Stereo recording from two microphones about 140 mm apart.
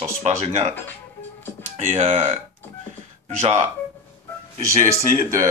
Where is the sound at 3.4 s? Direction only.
55° right (ahead or behind).